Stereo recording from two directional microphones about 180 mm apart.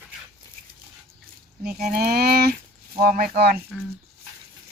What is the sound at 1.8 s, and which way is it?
Speech, 60° right (ahead or behind).